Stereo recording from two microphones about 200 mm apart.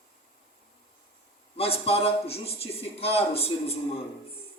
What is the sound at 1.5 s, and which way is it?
A man's voice, 30° left (ahead or behind).